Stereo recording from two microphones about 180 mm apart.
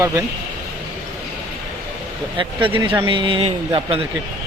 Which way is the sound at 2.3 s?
30° right (ahead or behind).